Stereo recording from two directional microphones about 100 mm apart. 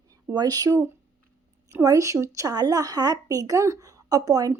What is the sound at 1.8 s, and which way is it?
Speech, 35° right (ahead or behind).